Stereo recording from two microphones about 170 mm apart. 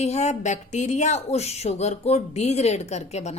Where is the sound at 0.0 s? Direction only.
40° left (ahead or behind).